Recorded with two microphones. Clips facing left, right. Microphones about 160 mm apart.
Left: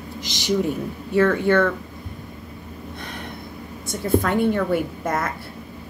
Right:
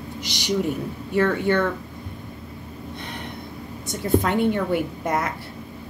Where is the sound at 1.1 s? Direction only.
15° right (ahead or behind).